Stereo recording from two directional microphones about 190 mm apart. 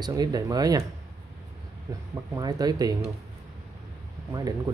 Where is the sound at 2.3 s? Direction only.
20° right (ahead or behind).